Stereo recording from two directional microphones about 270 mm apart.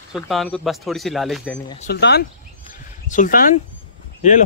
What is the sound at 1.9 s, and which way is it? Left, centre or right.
Speech, left.